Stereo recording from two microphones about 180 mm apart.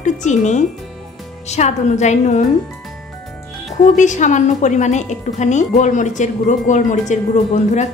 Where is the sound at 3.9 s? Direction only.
40° left (ahead or behind).